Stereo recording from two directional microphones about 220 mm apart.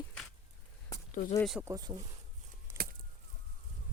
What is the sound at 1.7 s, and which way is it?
Speech, 20° right (ahead or behind).